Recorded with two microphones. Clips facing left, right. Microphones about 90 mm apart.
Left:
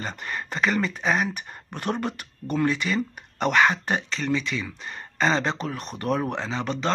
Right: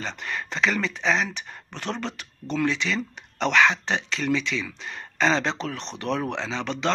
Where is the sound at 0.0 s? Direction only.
5° left (ahead or behind).